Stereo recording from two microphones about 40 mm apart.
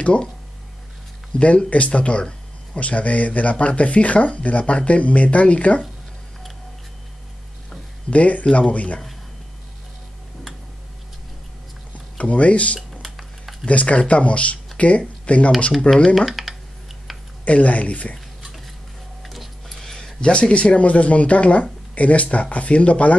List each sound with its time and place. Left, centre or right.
0.0 s speech: left
1.4 s speech: left
8.1 s speech: left
12.2 s speech: left
13.0 s dishes: centre
13.7 s speech: left
16.2 s computer keyboard: centre
17.1 s a sound: centre
17.5 s speech: left
19.2 s a sound: centre
19.9 s a sound: centre
20.2 s speech: left